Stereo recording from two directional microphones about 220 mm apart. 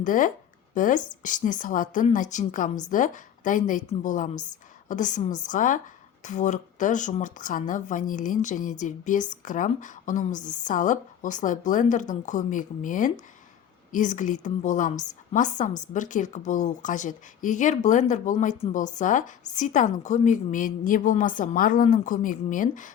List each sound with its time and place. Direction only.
0.0 s a woman's voice: 35° left (ahead or behind)